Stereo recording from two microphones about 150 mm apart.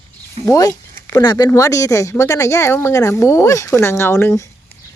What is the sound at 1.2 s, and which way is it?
A woman's voice, 30° left (ahead or behind).